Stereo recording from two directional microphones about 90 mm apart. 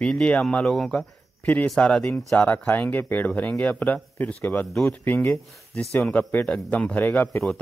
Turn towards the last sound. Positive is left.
turn(degrees=20)  # may be behind; listen again after turning